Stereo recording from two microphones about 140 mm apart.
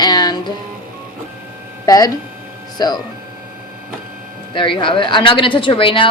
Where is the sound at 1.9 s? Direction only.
25° left (ahead or behind).